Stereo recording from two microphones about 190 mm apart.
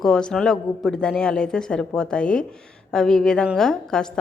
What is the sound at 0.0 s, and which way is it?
Speech, 5° left (ahead or behind).